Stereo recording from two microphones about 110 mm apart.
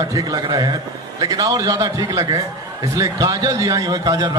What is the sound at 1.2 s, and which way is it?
A man's voice, 35° right (ahead or behind).